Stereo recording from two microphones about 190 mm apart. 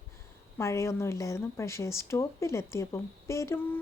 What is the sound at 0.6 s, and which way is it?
A woman's voice, 15° left (ahead or behind).